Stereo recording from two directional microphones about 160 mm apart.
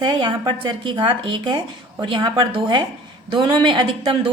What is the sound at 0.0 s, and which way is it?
A woman's voice, 30° right (ahead or behind).